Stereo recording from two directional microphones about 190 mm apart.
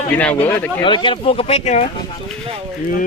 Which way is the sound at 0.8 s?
25° left (ahead or behind).